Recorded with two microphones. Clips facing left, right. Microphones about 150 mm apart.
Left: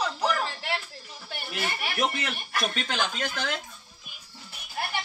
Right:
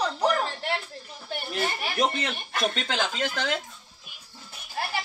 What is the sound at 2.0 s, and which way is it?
Speech, 20° right (ahead or behind).